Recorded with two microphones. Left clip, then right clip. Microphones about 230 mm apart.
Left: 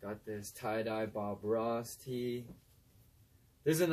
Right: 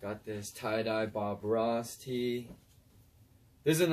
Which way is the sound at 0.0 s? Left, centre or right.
Centre.